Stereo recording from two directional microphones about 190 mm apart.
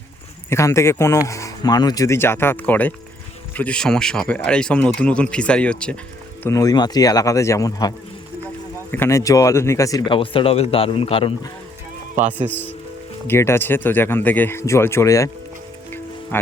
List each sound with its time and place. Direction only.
0.5 s speech: 15° left (ahead or behind)
6.4 s speech: 15° left (ahead or behind)
12.5 s speech: 10° left (ahead or behind)
16.3 s speech: 10° left (ahead or behind)